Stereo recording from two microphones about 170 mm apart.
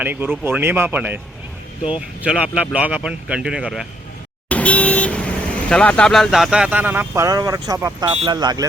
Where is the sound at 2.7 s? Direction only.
5° right (ahead or behind).